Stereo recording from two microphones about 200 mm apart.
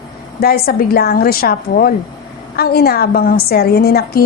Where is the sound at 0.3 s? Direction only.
50° left (ahead or behind).